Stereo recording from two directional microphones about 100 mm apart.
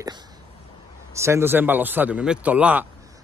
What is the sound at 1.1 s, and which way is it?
A man's voice, 30° right (ahead or behind).